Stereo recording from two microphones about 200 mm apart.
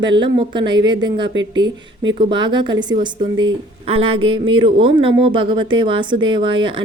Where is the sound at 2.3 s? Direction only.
25° right (ahead or behind).